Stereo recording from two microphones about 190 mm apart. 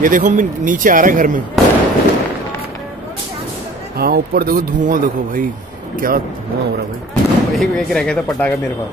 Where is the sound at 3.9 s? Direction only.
50° right (ahead or behind).